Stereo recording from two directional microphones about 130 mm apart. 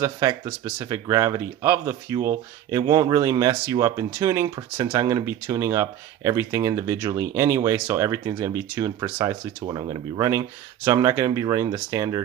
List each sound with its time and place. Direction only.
0.0 s speech: 25° right (ahead or behind)